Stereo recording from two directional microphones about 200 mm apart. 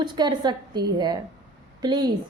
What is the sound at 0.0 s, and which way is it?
A woman's voice, 20° right (ahead or behind).